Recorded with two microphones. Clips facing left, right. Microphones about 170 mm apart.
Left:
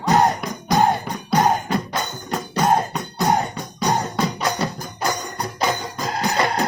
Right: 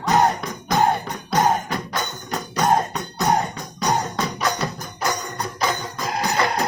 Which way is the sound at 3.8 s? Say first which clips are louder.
Left 1 dB; 30° left (ahead or behind).